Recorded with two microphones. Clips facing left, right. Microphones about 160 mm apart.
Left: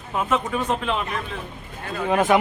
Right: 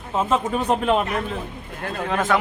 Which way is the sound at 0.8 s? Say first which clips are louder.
Right 6 dB; 50° right (ahead or behind).